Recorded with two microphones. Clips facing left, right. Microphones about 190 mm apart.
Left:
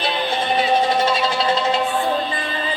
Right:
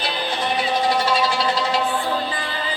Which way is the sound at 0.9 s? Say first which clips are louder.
Left 1 dB; 25° left (ahead or behind).